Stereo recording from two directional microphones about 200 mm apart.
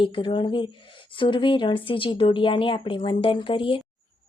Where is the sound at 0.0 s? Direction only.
25° left (ahead or behind).